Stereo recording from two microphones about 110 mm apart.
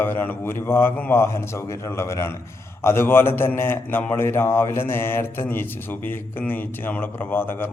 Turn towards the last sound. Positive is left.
turn(degrees=20)  # may be behind; listen again after turning